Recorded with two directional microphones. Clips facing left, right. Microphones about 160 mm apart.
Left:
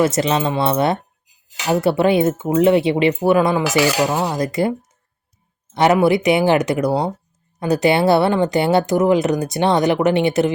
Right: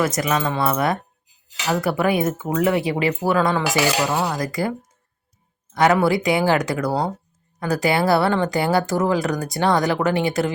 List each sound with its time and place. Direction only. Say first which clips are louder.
0.0 s speech: left 4 dB; 25° left (ahead or behind)
4.0 s cutlery: left 3 dB; 15° left (ahead or behind)
4.4 s speech: left 5 dB; 25° left (ahead or behind)
5.7 s speech: left 3 dB; 20° left (ahead or behind)